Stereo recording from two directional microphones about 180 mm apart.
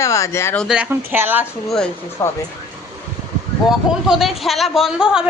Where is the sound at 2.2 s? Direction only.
15° left (ahead or behind).